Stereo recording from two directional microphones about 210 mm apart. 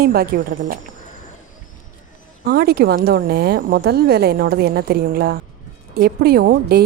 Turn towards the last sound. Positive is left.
turn(degrees=-50)  # may be behind; listen again after turning